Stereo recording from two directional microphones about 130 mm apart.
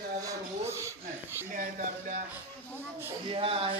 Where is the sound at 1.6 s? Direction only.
70° right (ahead or behind).